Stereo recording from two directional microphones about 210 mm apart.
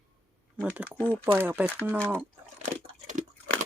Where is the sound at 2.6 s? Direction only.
35° right (ahead or behind).